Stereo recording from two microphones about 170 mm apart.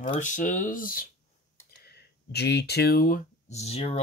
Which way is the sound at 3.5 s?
40° left (ahead or behind).